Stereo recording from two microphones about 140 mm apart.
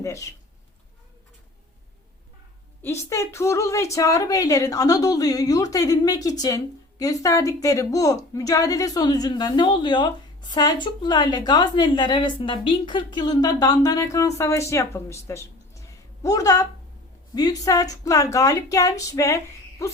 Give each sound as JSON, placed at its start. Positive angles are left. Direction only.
{"t": 0.0, "sound": "speech", "side_deg": 20}
{"t": 2.8, "sound": "a woman's voice", "side_deg": 20}
{"t": 19.8, "sound": "insect", "side_deg": 20}